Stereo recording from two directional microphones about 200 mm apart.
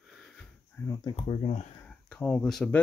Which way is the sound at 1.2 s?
30° left (ahead or behind).